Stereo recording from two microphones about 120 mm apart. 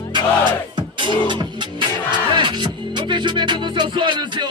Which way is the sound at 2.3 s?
40° right (ahead or behind).